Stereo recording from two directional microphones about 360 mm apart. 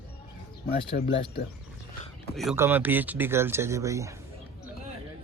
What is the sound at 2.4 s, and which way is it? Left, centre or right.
Speech, centre.